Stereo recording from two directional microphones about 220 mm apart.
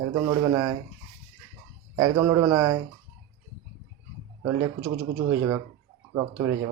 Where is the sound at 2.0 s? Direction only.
15° right (ahead or behind).